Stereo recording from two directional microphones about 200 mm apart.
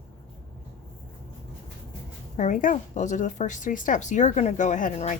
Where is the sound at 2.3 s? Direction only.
40° left (ahead or behind).